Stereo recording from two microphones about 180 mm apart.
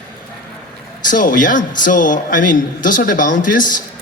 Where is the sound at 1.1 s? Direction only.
50° left (ahead or behind).